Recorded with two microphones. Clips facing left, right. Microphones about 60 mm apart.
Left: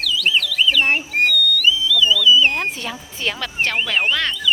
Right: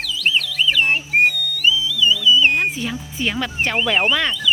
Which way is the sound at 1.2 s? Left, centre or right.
Right.